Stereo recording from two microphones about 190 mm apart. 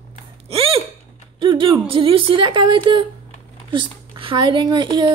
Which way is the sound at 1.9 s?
25° right (ahead or behind).